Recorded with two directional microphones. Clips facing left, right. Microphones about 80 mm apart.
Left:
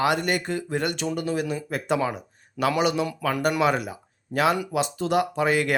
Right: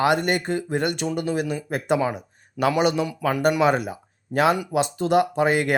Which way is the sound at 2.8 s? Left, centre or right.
Right.